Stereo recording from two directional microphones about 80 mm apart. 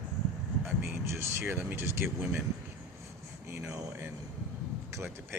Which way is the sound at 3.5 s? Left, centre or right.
Right.